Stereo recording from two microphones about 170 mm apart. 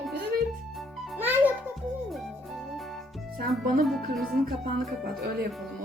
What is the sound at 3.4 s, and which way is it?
Speech, 60° right (ahead or behind).